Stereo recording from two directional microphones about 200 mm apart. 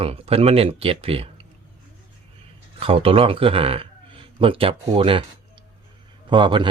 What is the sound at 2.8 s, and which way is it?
Speech, 30° right (ahead or behind).